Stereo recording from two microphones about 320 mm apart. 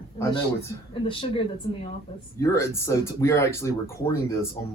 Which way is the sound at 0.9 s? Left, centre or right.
Centre.